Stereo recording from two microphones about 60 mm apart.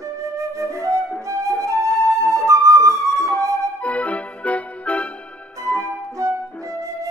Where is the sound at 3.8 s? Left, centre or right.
Left.